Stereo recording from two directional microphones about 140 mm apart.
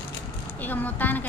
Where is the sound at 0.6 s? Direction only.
10° left (ahead or behind).